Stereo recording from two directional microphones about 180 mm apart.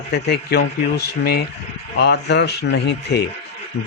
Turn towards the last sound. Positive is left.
turn(degrees=65)  # may be behind; listen again after turning